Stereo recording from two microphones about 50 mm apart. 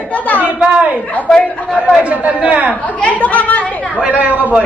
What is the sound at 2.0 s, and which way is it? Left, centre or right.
Speech, right.